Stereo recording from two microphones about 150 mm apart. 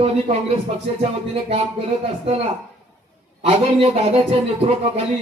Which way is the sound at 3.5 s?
45° right (ahead or behind).